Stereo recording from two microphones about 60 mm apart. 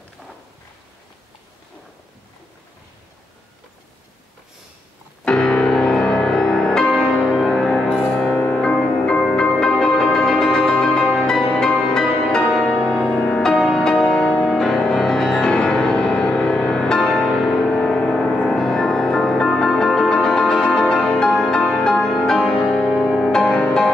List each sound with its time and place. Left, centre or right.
5.2 s music: centre
8.1 s music: centre
9.2 s music: centre